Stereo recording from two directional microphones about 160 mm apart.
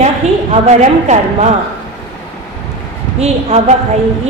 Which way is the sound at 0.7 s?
45° right (ahead or behind).